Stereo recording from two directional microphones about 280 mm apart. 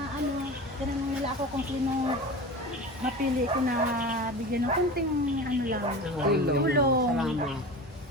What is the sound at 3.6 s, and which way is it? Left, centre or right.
Speech, right.